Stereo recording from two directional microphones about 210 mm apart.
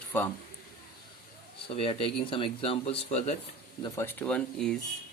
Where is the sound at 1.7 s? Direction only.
25° left (ahead or behind).